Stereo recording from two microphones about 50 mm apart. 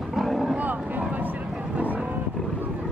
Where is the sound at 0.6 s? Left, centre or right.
Right.